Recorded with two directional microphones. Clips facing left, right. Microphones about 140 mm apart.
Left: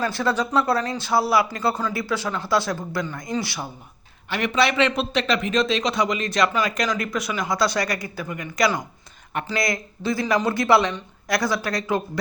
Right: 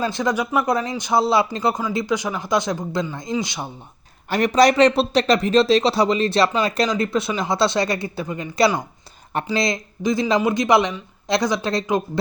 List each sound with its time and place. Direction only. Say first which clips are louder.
0.0 s speech: right 1 dB; 15° right (ahead or behind)
4.3 s speech: right 6 dB; 40° right (ahead or behind); by 12.2 s 20° right (ahead or behind)